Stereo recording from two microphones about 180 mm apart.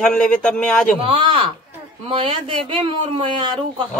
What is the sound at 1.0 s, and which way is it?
Speech, 30° right (ahead or behind).